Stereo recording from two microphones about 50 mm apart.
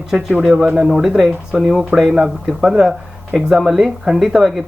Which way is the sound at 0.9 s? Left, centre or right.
Centre.